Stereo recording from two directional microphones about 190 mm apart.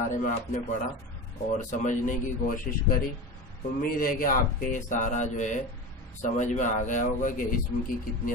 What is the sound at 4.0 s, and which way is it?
Speech, 45° left (ahead or behind).